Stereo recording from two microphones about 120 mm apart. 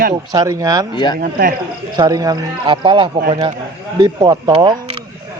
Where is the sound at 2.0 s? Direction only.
30° right (ahead or behind).